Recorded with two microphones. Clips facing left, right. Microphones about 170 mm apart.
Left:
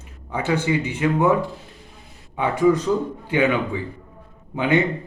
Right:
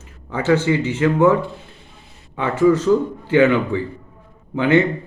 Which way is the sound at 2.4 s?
15° left (ahead or behind).